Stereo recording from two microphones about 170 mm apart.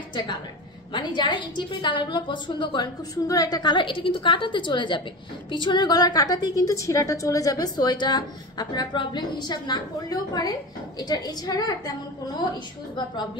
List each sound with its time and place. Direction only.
0.9 s a woman's voice: 25° left (ahead or behind)